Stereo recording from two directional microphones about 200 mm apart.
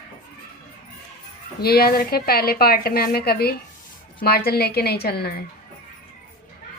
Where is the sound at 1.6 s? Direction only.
50° left (ahead or behind).